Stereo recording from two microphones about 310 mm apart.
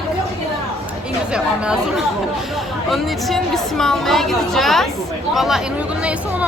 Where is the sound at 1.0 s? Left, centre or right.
Centre.